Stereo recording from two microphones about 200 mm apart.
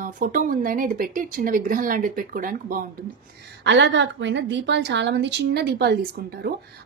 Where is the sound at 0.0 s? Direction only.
45° right (ahead or behind).